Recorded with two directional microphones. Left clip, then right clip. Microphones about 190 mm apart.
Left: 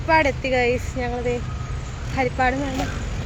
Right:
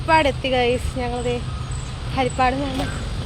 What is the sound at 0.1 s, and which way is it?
Speech, 20° right (ahead or behind).